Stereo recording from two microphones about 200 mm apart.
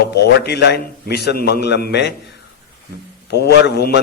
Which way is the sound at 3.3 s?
55° left (ahead or behind).